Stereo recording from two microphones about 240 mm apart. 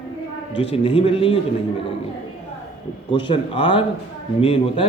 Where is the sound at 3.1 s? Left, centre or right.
Left.